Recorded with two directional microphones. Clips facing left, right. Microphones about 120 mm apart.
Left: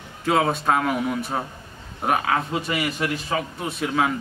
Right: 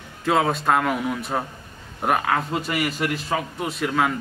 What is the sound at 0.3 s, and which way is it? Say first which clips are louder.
Speech: even; centre (ahead or behind).